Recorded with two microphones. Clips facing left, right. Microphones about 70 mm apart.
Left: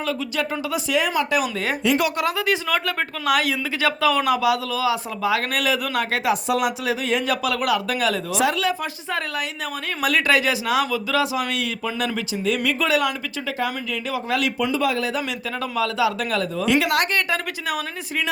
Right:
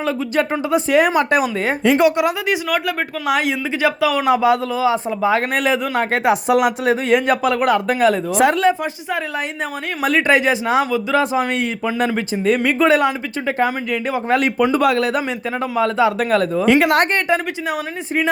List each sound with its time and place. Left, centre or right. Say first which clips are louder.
0.5 s speech: right 8 dB; right
2.0 s speech: right 7 dB; right
4.3 s speech: right 5 dB; right
6.1 s speech: right 7 dB; right
10.0 s speech: right 4 dB; right
14.8 s speech: right 6 dB; right
15.6 s speech: right 5 dB; right
16.0 s speech: right 7 dB; right